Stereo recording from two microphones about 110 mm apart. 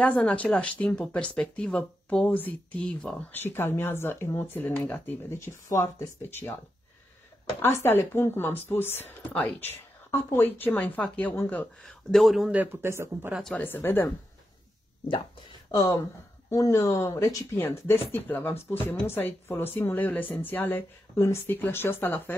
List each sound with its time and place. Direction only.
0.0 s speech: 10° left (ahead or behind)
7.6 s speech: 20° left (ahead or behind)
11.8 s speech: centre (ahead or behind)
12.4 s speech: 20° right (ahead or behind)
13.6 s speech: 20° left (ahead or behind)
16.4 s speech: 30° left (ahead or behind)